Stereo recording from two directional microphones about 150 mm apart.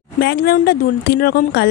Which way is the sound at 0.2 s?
90° left.